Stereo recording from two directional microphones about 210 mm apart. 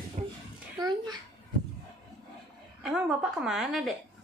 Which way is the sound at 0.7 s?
20° right (ahead or behind).